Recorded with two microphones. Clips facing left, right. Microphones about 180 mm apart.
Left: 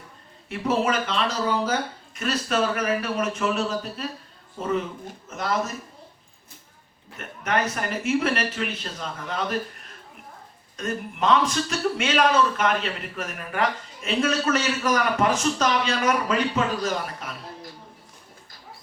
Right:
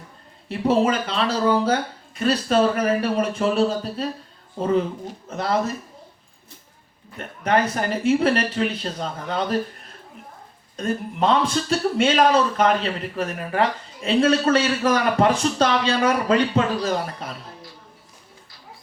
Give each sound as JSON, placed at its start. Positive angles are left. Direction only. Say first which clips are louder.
{"t": 0.4, "sound": "a man's voice", "louder": "right 4 dB", "side_deg": -30}
{"t": 7.2, "sound": "a man's voice", "louder": "right 5 dB", "side_deg": -35}
{"t": 10.8, "sound": "a man's voice", "louder": "right 4 dB", "side_deg": -30}